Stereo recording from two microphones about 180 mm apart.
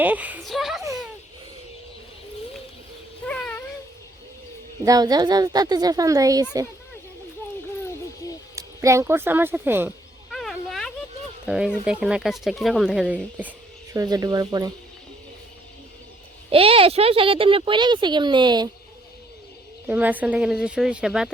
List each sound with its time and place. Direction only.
0.0 s speech: 10° right (ahead or behind)
3.2 s a sound: 5° left (ahead or behind)
4.8 s speech: 20° right (ahead or behind)
8.5 s speech: 15° right (ahead or behind)
10.3 s a sound: centre (ahead or behind)
11.4 s speech: 5° right (ahead or behind)
13.9 s speech: 20° right (ahead or behind)
16.5 s speech: 30° right (ahead or behind)
19.9 s speech: 10° right (ahead or behind)